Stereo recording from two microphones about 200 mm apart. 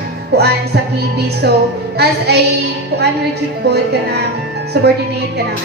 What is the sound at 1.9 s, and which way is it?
Music, 55° right (ahead or behind).